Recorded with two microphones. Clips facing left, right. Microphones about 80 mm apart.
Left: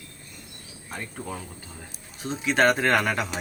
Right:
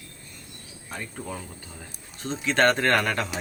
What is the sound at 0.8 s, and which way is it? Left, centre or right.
Speech, centre.